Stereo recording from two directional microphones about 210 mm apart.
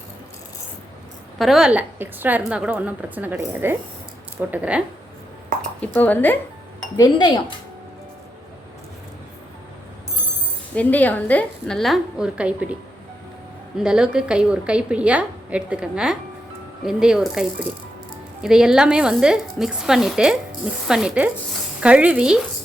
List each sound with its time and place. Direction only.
1.4 s a woman's voice: centre (ahead or behind)
5.8 s speech: 5° left (ahead or behind)
6.9 s speech: 20° left (ahead or behind)
10.8 s a woman's voice: 5° left (ahead or behind)
13.7 s a woman's voice: 5° right (ahead or behind)
18.4 s a woman's voice: 5° right (ahead or behind)